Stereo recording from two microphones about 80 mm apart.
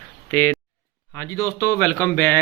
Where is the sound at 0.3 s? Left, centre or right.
Left.